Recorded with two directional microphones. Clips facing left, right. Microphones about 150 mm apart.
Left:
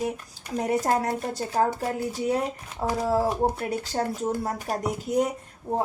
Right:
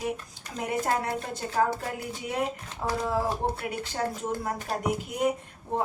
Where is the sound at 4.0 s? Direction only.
35° left (ahead or behind).